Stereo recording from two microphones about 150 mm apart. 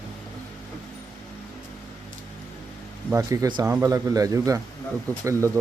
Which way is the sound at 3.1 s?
20° right (ahead or behind).